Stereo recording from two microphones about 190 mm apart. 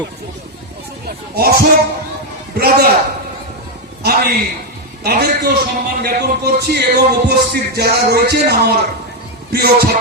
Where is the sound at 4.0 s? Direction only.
55° right (ahead or behind).